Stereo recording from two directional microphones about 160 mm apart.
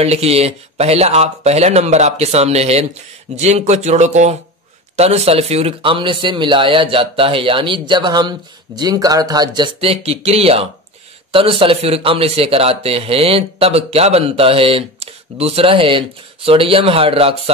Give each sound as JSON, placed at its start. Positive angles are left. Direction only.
{"t": 0.0, "sound": "a man's voice", "side_deg": -40}